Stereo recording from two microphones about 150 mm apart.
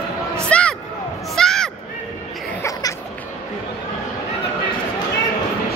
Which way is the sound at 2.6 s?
25° left (ahead or behind).